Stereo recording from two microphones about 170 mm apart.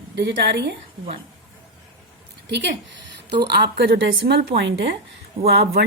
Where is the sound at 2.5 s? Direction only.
90° right.